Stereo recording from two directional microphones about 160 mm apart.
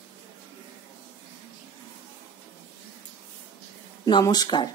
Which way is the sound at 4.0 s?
25° left (ahead or behind).